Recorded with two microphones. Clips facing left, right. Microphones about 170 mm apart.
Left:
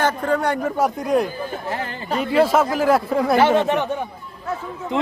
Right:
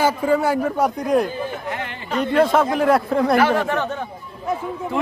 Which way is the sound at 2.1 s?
5° left (ahead or behind).